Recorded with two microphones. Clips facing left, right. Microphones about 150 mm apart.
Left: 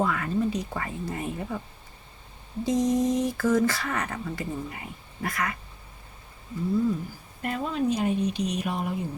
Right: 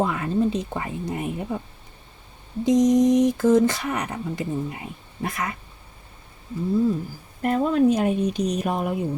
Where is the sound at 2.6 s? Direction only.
20° right (ahead or behind).